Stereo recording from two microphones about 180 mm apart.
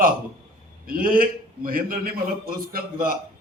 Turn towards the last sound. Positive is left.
turn(degrees=-55)  # may be behind; listen again after turning